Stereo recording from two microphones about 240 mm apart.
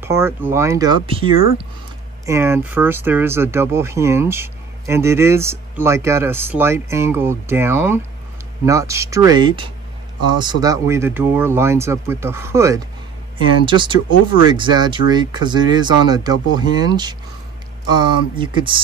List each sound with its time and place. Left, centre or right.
0.0 s speech: centre
2.2 s speech: centre